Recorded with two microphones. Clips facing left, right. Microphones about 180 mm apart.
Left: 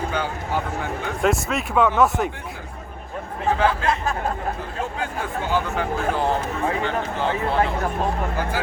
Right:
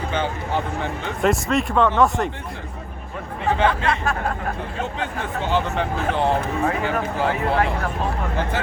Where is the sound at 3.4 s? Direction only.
Centre (ahead or behind).